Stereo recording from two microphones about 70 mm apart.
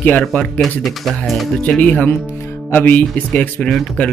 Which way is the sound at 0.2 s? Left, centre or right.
Centre.